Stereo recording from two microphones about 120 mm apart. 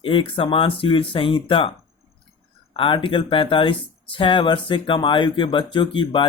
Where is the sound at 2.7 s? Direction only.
45° left (ahead or behind).